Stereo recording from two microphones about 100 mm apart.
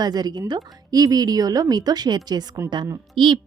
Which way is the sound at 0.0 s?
45° right (ahead or behind).